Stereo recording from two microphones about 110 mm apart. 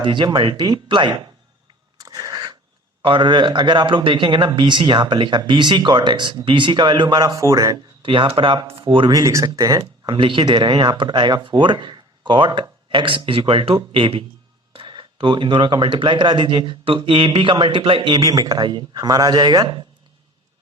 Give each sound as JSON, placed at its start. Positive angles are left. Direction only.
{"t": 0.0, "sound": "speech", "side_deg": -45}
{"t": 2.0, "sound": "a sound", "side_deg": -35}
{"t": 3.0, "sound": "speech", "side_deg": -45}
{"t": 8.0, "sound": "speech", "side_deg": -50}
{"t": 9.1, "sound": "speech", "side_deg": -30}
{"t": 10.2, "sound": "speech", "side_deg": -50}